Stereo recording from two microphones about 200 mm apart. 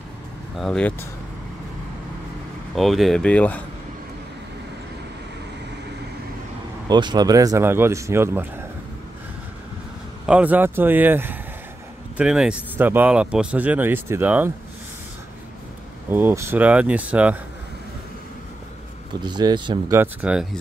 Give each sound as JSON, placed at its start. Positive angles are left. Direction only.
{"t": 0.6, "sound": "speech", "side_deg": 5}
{"t": 2.7, "sound": "speech", "side_deg": 0}
{"t": 6.9, "sound": "speech", "side_deg": -20}
{"t": 10.2, "sound": "speech", "side_deg": -5}
{"t": 16.1, "sound": "speech", "side_deg": -10}
{"t": 19.2, "sound": "speech", "side_deg": -20}